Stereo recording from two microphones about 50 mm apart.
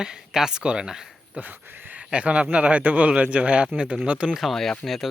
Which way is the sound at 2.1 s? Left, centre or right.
Right.